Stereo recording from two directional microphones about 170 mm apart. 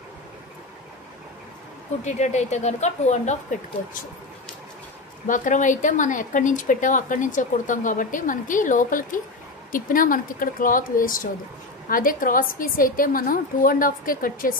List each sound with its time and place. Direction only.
2.0 s speech: 45° left (ahead or behind)
5.2 s a woman's voice: 50° left (ahead or behind)